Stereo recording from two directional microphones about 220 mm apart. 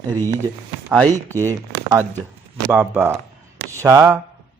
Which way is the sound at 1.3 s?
15° right (ahead or behind).